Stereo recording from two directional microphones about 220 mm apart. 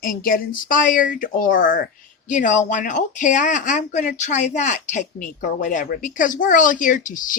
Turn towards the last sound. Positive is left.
turn(degrees=35)  # may be behind; listen again after turning